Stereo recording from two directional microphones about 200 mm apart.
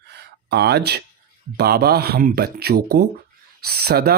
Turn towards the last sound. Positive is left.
turn(degrees=-50)  # may be behind; listen again after turning